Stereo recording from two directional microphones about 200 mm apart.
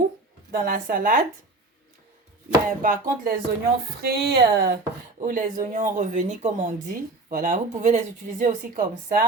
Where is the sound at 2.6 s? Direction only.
40° right (ahead or behind).